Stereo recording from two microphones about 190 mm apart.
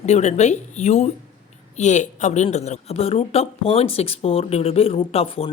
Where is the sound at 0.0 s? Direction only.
35° left (ahead or behind).